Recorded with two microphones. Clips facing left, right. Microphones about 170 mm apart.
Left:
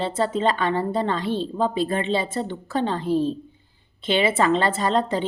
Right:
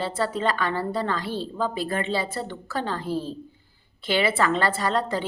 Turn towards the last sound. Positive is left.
turn(degrees=25)  # may be behind; listen again after turning